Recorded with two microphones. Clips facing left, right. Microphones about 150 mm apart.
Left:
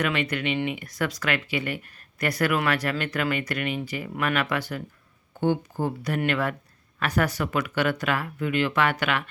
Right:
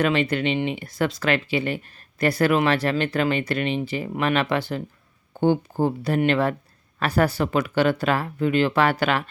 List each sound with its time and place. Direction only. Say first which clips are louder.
0.0 s speech: right 5 dB; 30° right (ahead or behind)